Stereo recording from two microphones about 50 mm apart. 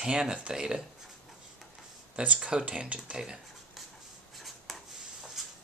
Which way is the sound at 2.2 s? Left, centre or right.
Centre.